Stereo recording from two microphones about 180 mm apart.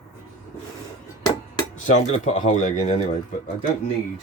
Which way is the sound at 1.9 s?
40° left (ahead or behind).